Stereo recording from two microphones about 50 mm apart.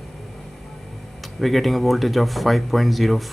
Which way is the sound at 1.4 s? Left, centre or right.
Centre.